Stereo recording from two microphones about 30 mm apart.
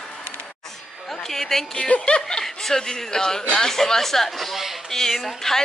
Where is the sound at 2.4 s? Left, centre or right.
Centre.